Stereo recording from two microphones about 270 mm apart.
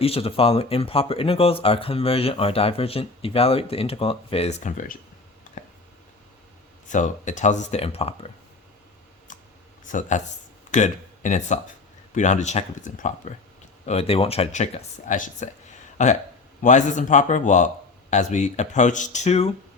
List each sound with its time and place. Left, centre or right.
0.0 s speech: left
6.8 s speech: left
9.8 s speech: left